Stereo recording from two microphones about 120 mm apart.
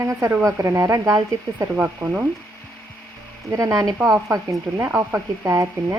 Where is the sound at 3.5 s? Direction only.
25° right (ahead or behind).